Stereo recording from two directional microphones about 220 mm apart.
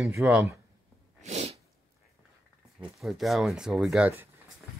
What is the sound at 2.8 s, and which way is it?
Speech, centre (ahead or behind).